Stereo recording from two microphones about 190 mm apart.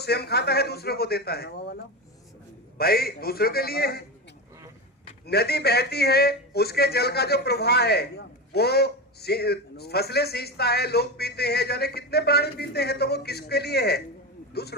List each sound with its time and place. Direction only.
0.0 s a man's voice: 60° left (ahead or behind)
5.2 s a man's voice: 55° left (ahead or behind)